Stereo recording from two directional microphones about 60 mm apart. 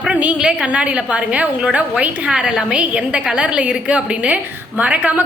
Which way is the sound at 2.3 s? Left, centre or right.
Centre.